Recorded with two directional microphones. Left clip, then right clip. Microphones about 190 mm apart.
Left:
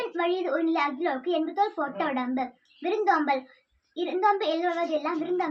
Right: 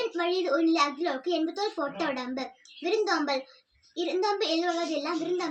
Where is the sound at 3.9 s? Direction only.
20° left (ahead or behind).